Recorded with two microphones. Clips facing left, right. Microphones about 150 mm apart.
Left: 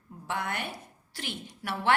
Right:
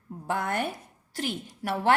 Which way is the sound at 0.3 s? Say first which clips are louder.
Right 5 dB; 45° right (ahead or behind).